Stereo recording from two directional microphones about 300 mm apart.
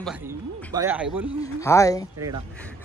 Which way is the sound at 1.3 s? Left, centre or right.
Centre.